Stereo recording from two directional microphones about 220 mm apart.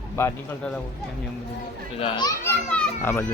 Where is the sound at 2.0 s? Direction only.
20° left (ahead or behind).